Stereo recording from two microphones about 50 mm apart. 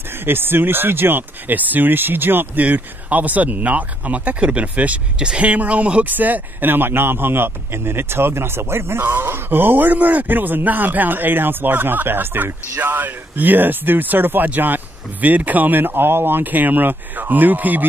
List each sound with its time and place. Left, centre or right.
0.1 s a man's voice: right